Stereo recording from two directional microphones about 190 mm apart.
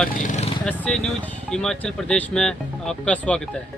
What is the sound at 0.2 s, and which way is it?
Vehicle, 40° left (ahead or behind).